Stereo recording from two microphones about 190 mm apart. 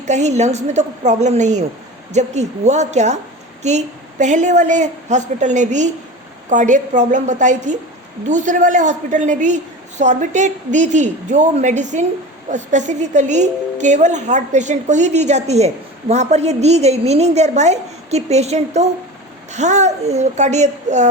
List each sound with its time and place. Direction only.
0.0 s a woman's voice: 35° right (ahead or behind)